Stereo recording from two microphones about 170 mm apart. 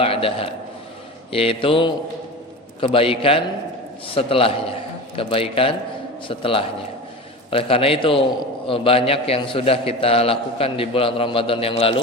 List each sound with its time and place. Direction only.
0.0 s a man's voice: 35° left (ahead or behind)